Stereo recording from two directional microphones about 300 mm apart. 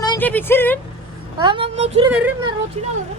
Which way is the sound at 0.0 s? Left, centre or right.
Centre.